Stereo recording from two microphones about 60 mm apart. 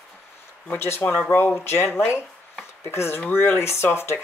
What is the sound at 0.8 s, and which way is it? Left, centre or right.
Speech, left.